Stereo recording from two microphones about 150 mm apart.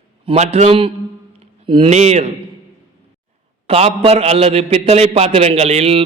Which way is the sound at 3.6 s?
40° right (ahead or behind).